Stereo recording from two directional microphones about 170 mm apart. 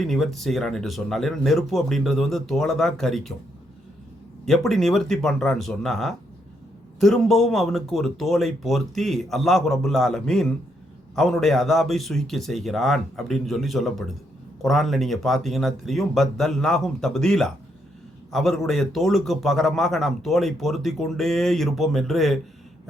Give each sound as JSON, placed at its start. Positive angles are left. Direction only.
{"t": 0.0, "sound": "a man's voice", "side_deg": 0}
{"t": 4.4, "sound": "a man's voice", "side_deg": 0}